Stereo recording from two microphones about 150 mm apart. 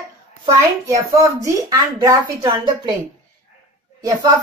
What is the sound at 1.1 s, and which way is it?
Speech, 25° right (ahead or behind).